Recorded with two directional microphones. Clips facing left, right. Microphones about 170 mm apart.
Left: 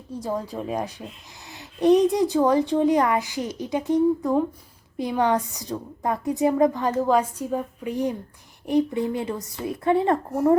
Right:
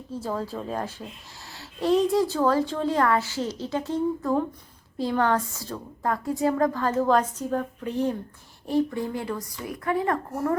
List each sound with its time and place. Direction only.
0.1 s a woman's voice: 15° left (ahead or behind)